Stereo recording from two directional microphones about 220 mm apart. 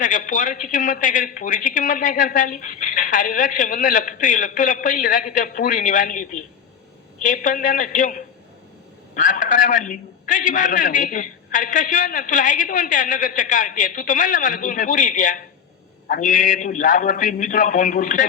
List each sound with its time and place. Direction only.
0.0 s a man's voice: 35° left (ahead or behind)